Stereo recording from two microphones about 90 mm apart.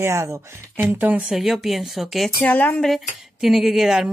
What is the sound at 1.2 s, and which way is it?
Speech, 5° right (ahead or behind).